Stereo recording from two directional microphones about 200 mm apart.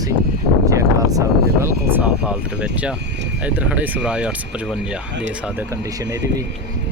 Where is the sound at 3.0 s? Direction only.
60° right (ahead or behind).